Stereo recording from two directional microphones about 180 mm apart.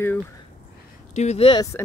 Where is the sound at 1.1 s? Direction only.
40° left (ahead or behind).